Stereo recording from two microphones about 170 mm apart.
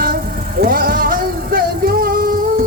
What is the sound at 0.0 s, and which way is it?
Vehicle, 60° right (ahead or behind).